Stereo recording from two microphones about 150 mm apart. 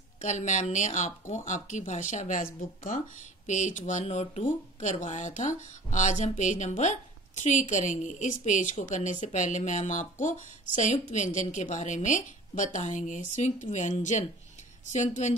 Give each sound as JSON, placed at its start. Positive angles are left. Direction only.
{"t": 0.2, "sound": "a woman's voice", "side_deg": 55}
{"t": 2.6, "sound": "speech", "side_deg": 70}
{"t": 3.4, "sound": "a woman's voice", "side_deg": 55}